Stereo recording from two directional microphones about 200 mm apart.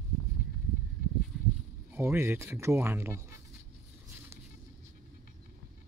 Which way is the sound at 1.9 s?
10° right (ahead or behind).